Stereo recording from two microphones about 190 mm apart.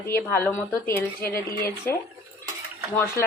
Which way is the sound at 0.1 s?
10° left (ahead or behind).